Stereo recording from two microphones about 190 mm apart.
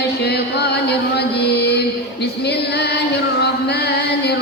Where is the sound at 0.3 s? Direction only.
60° left (ahead or behind).